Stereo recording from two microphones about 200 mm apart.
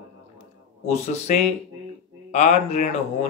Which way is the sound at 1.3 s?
40° left (ahead or behind).